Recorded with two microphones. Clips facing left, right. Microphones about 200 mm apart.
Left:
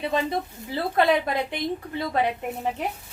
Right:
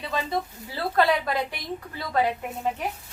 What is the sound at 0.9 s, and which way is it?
A woman's voice, 20° left (ahead or behind).